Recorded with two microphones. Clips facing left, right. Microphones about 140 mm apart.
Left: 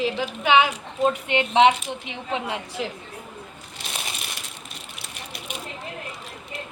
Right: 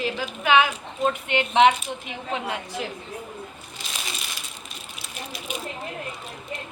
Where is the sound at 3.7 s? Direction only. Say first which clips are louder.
Left 2 dB; 60° left (ahead or behind).